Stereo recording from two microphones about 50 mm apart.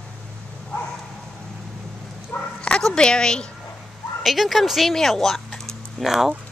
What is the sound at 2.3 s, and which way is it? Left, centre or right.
Dog, left.